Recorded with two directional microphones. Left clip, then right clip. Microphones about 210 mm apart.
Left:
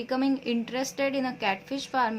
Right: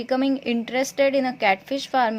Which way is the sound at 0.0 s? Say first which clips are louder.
Right 5 dB; 30° right (ahead or behind).